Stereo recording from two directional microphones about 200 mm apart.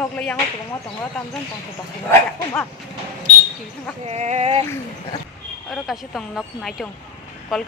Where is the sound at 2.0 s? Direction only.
10° left (ahead or behind).